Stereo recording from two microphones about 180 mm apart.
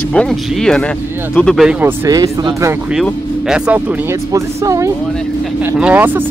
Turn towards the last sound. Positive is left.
turn(degrees=-10)  # may be behind; listen again after turning